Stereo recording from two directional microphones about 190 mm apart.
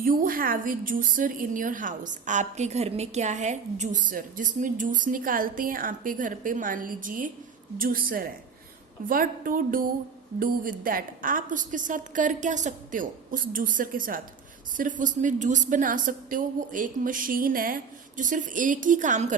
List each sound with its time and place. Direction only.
0.0 s a woman's voice: 45° right (ahead or behind)